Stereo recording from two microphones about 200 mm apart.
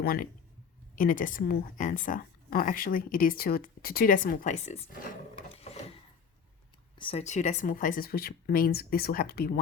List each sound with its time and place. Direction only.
0.0 s a woman's voice: 50° left (ahead or behind)
7.0 s a woman's voice: 30° left (ahead or behind); by 9.6 s 50° left (ahead or behind)